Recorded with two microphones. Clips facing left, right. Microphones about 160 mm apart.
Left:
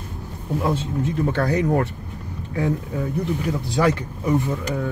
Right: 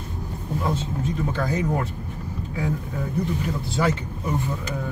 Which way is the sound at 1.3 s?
65° left (ahead or behind).